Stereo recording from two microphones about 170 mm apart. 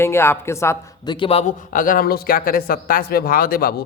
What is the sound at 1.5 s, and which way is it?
Speech, 50° left (ahead or behind).